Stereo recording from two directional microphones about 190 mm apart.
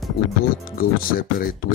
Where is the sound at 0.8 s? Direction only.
50° left (ahead or behind).